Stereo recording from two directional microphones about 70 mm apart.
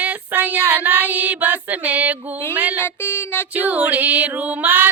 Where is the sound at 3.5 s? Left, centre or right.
Right.